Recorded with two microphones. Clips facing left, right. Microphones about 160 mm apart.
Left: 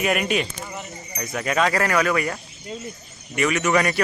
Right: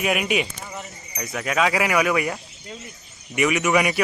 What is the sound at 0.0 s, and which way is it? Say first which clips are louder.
Speech: left 1 dB; 5° right (ahead or behind).